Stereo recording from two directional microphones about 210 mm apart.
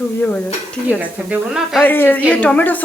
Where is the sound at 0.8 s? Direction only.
5° right (ahead or behind).